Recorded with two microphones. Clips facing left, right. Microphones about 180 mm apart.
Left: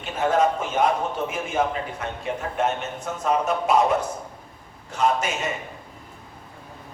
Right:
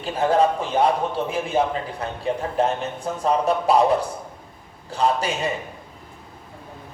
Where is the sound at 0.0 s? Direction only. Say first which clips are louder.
Right 2 dB; 35° right (ahead or behind).